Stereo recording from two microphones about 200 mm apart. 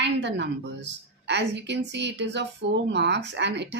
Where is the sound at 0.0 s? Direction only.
60° right (ahead or behind).